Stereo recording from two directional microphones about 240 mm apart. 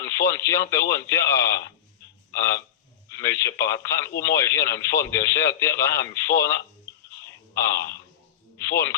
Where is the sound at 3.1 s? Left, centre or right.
Centre.